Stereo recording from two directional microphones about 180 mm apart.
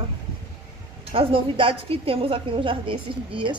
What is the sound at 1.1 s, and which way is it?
A woman's voice, 30° right (ahead or behind).